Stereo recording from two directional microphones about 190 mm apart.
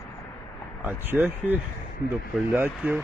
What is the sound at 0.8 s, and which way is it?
Speech, 10° right (ahead or behind).